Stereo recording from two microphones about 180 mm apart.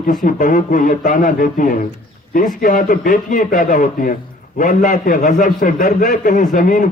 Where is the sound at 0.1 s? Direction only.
45° left (ahead or behind).